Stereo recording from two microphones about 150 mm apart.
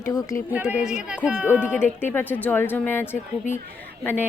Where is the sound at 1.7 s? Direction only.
15° left (ahead or behind).